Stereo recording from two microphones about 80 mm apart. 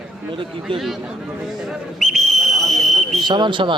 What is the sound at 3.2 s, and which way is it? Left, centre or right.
Speech, right.